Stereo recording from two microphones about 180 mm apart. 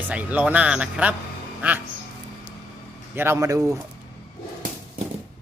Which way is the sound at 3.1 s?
15° right (ahead or behind).